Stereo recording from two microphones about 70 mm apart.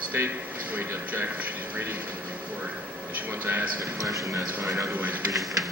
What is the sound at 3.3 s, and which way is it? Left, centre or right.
Speech, right.